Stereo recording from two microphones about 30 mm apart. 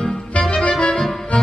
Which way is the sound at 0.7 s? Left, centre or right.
Left.